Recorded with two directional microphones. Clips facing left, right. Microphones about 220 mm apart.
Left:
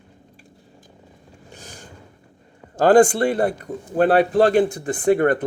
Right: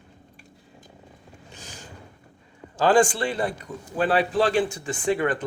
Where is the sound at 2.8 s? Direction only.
55° left (ahead or behind).